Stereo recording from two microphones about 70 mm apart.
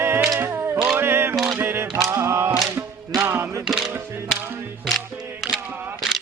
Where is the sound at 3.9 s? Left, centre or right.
Right.